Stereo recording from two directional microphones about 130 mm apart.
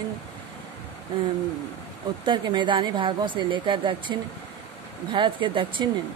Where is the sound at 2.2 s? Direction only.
35° right (ahead or behind).